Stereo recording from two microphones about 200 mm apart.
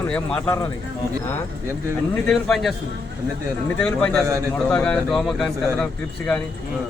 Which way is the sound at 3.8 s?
5° left (ahead or behind).